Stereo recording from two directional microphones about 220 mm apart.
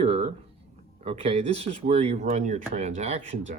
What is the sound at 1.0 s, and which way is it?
Speech, 30° right (ahead or behind).